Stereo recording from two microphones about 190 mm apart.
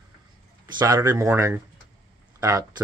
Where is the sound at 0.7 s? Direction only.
20° right (ahead or behind).